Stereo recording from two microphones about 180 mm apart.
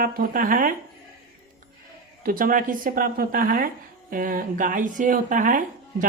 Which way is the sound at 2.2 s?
50° right (ahead or behind).